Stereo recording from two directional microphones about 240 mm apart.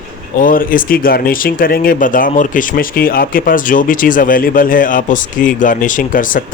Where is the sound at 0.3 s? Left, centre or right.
Left.